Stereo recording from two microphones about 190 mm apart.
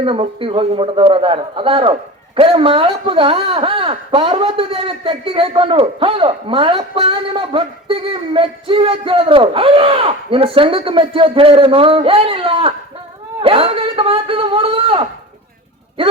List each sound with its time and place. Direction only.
0.0 s a man's voice: 30° right (ahead or behind)